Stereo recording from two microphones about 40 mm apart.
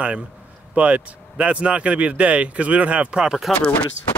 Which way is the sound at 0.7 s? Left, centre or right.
Right.